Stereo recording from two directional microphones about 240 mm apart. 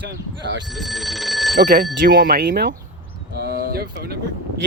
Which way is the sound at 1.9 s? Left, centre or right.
Right.